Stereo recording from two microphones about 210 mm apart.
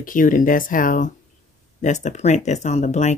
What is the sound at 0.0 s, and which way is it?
Speech, 40° left (ahead or behind).